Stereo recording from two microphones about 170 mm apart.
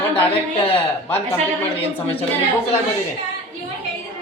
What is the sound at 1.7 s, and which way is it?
Speech, 35° left (ahead or behind).